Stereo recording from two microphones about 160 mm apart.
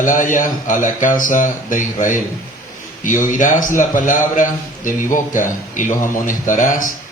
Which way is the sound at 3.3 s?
55° left (ahead or behind).